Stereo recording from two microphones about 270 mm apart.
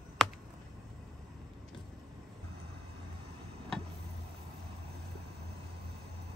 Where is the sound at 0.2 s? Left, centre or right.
Centre.